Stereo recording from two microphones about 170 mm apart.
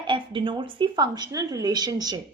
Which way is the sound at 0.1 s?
30° right (ahead or behind).